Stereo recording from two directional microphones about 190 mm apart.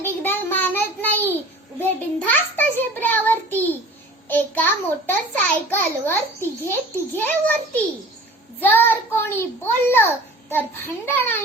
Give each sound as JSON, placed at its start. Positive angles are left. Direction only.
{"t": 0.0, "sound": "child singing", "side_deg": 10}
{"t": 4.3, "sound": "a child's voice", "side_deg": 10}